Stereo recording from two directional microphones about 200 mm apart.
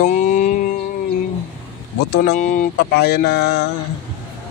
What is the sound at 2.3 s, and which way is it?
Speech, 40° left (ahead or behind).